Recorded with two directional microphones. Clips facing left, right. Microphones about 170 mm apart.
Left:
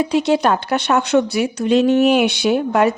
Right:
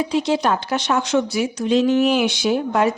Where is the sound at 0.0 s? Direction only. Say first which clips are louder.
Left 3 dB; 65° left (ahead or behind).